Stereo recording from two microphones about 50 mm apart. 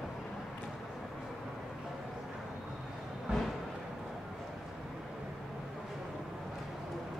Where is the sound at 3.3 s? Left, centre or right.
Centre.